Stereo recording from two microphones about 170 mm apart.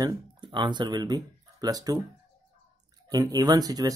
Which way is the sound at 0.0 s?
25° right (ahead or behind).